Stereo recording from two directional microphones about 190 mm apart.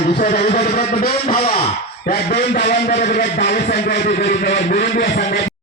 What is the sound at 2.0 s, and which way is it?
Speech, 55° left (ahead or behind).